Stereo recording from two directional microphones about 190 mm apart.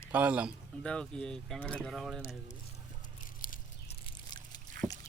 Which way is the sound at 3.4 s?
45° left (ahead or behind).